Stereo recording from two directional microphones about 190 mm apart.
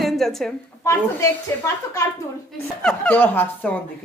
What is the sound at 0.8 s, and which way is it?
A woman's voice, 15° left (ahead or behind).